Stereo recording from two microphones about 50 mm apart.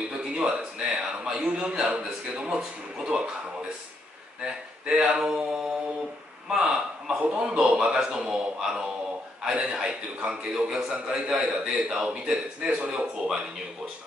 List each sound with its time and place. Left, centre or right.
0.3 s a man's voice: centre
4.4 s a man's voice: centre
6.5 s a sound: centre
7.2 s a man's voice: centre